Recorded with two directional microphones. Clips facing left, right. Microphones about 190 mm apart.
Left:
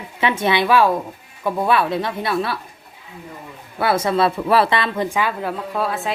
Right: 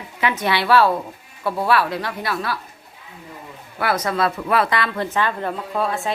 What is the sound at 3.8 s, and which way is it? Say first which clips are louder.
A woman's voice: left 3 dB; 25° left (ahead or behind).